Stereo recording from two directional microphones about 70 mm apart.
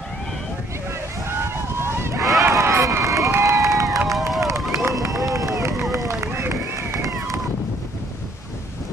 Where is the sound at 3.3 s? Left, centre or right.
Right.